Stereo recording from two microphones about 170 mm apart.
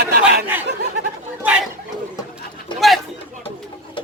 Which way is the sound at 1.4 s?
10° right (ahead or behind).